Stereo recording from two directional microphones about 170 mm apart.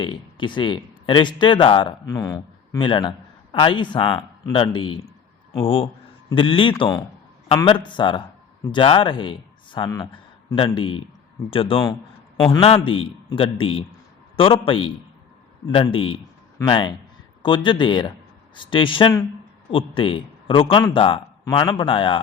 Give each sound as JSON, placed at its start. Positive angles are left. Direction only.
{"t": 0.0, "sound": "a man's voice", "side_deg": 30}